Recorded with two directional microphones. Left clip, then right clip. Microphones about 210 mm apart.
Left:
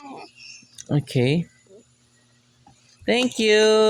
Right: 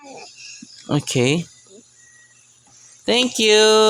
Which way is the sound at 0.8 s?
35° right (ahead or behind).